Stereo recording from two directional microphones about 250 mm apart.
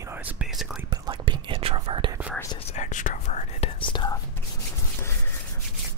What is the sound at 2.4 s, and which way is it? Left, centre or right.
Whispering, centre.